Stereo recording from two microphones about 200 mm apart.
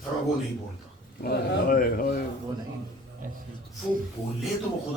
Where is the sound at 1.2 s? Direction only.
50° left (ahead or behind).